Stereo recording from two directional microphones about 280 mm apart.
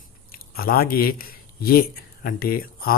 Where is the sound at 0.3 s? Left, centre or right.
Left.